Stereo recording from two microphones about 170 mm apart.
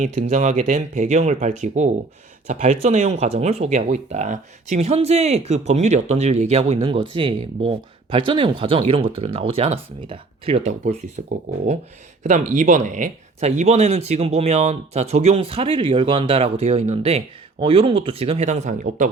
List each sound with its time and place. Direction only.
0.0 s speech: 45° right (ahead or behind)